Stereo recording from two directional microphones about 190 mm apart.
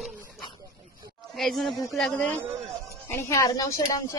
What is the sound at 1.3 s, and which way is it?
A woman's voice, centre (ahead or behind).